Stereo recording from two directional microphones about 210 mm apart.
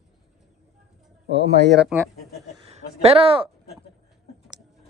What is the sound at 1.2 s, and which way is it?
Speech, 55° right (ahead or behind).